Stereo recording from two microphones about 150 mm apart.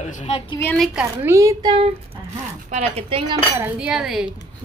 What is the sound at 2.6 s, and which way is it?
Speech, 45° right (ahead or behind).